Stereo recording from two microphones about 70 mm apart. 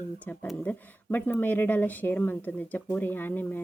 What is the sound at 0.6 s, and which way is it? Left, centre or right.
Speech, left.